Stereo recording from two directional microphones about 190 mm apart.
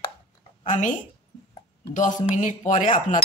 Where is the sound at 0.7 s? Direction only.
40° left (ahead or behind).